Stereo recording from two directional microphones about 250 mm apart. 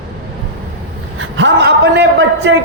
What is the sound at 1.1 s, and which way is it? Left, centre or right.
A man's voice, right.